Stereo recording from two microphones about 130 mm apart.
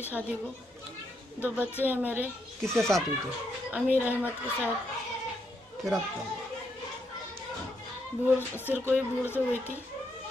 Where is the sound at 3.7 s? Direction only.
10° right (ahead or behind).